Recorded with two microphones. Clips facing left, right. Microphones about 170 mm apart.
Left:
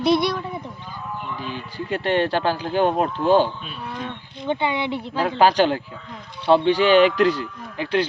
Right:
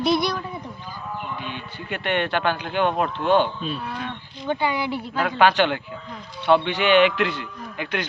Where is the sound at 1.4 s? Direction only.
35° left (ahead or behind).